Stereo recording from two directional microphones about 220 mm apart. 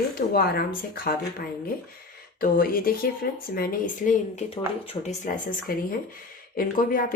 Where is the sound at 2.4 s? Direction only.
40° left (ahead or behind).